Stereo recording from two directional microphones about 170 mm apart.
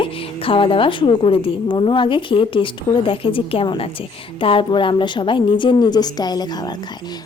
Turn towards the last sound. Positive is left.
turn(degrees=25)  # may be behind; listen again after turning